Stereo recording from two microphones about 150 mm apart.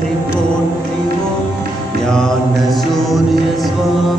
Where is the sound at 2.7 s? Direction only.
Centre (ahead or behind).